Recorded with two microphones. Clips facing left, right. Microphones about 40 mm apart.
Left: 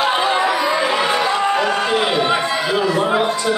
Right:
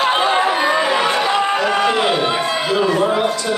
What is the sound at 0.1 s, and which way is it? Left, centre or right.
Chatter, right.